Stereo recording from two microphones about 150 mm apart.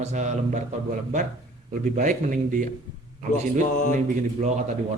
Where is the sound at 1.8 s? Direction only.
60° right (ahead or behind).